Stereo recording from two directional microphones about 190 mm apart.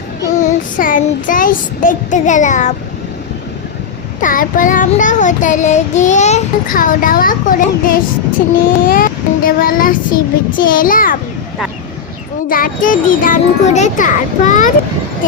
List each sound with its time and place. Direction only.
0.3 s child singing: 45° left (ahead or behind)
4.2 s child singing: 45° left (ahead or behind)
12.5 s child singing: 45° left (ahead or behind)